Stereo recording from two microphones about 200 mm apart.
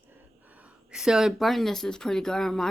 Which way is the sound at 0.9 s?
5° right (ahead or behind).